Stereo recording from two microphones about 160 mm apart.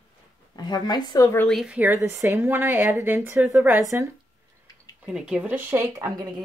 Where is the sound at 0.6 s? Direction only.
25° left (ahead or behind).